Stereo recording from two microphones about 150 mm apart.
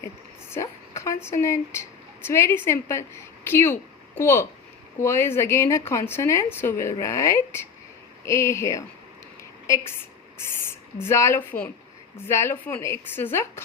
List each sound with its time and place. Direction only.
0.5 s a woman's voice: 20° left (ahead or behind)
9.4 s a sound: 20° left (ahead or behind)
11.0 s a woman's voice: 20° left (ahead or behind)